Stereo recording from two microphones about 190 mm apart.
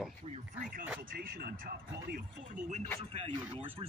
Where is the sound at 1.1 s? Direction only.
50° right (ahead or behind).